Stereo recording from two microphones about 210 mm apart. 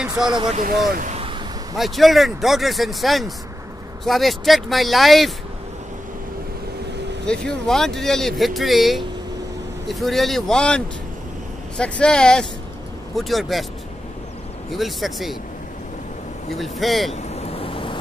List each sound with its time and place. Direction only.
0.3 s speech: 20° right (ahead or behind)
0.6 s speech: 45° right (ahead or behind)
1.1 s a sound: 25° right (ahead or behind)
1.8 s speech: centre (ahead or behind)
7.2 s speech: 5° left (ahead or behind)
14.7 s speech: centre (ahead or behind)
16.8 s speech: centre (ahead or behind)
17.1 s vehicle: 30° left (ahead or behind)